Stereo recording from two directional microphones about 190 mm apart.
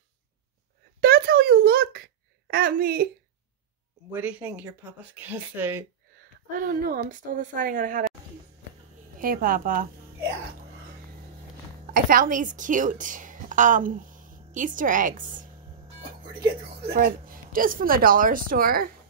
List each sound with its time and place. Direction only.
1.0 s a sound: 55° right (ahead or behind)
4.1 s speech: 10° right (ahead or behind)
6.5 s a woman's voice: 45° right (ahead or behind)
9.2 s a woman's voice: 50° right (ahead or behind)
11.8 s a woman's voice: 45° right (ahead or behind)
16.8 s a woman's voice: 45° right (ahead or behind)